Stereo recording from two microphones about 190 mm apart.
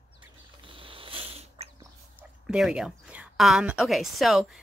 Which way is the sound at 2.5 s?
5° right (ahead or behind).